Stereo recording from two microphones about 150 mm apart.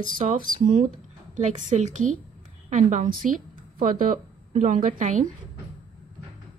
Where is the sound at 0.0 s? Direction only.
60° right (ahead or behind).